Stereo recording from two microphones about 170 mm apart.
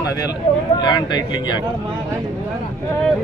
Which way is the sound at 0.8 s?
25° left (ahead or behind).